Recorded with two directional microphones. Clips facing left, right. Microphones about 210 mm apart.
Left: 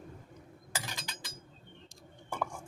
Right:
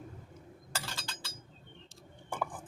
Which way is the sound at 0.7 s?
15° left (ahead or behind).